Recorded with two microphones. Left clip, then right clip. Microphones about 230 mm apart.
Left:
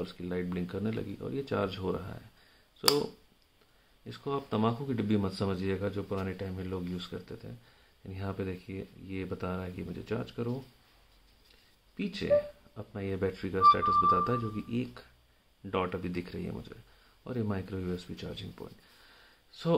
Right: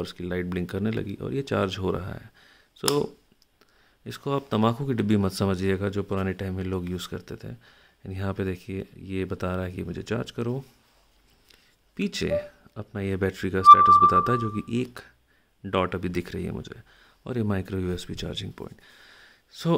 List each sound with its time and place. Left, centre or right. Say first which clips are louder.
0.0 s speech: right 5 dB; right
4.0 s speech: right 6 dB; right
12.0 s speech: right 1 dB; right